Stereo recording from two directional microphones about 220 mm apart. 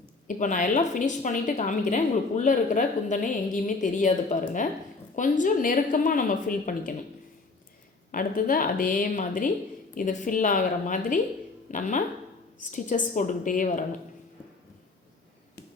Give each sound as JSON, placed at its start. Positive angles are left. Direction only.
{"t": 0.3, "sound": "a woman's voice", "side_deg": 35}
{"t": 8.1, "sound": "a woman's voice", "side_deg": 40}